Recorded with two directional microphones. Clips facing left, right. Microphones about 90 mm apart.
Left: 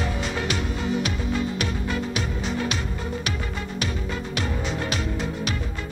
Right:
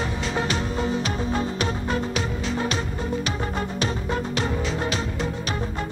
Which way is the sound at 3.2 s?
35° right (ahead or behind).